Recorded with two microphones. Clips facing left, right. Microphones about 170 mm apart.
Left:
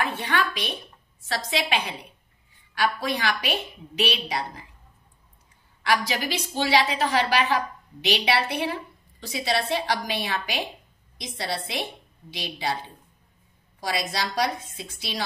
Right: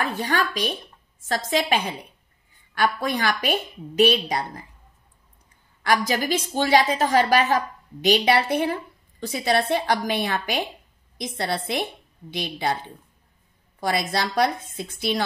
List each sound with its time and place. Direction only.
0.0 s a woman's voice: 40° right (ahead or behind)
5.9 s a woman's voice: 45° right (ahead or behind)
13.7 s a woman's voice: 55° right (ahead or behind)